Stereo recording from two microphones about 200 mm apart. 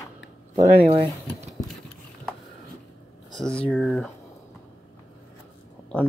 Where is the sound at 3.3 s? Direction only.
5° left (ahead or behind).